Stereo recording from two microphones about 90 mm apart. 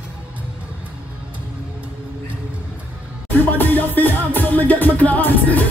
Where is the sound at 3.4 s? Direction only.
20° left (ahead or behind).